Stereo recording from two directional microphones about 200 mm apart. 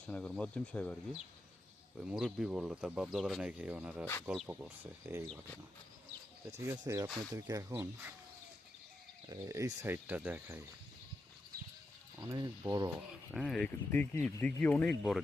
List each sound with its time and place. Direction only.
0.1 s speech: 5° left (ahead or behind); by 5.3 s 10° right (ahead or behind)
6.6 s speech: 15° right (ahead or behind)
9.3 s speech: 15° right (ahead or behind)
12.2 s speech: 15° right (ahead or behind)
13.0 s speech: centre (ahead or behind)